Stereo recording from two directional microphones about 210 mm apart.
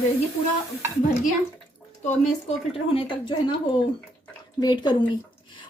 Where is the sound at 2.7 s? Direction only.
25° left (ahead or behind).